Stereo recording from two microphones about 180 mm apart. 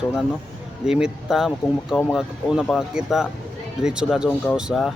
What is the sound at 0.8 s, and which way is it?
Speech, 5° right (ahead or behind).